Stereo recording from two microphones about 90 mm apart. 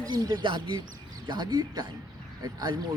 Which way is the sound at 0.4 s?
55° right (ahead or behind).